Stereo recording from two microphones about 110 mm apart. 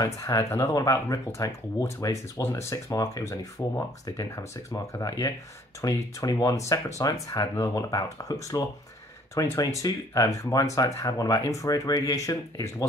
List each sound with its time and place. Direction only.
0.0 s speech: 30° left (ahead or behind)